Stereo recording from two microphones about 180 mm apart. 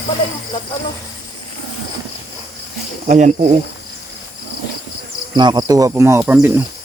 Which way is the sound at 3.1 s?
40° right (ahead or behind).